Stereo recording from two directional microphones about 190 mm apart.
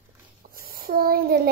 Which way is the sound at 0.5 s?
50° right (ahead or behind).